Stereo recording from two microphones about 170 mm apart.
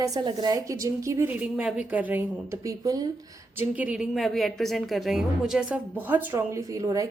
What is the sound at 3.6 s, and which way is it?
A woman's voice, 10° right (ahead or behind).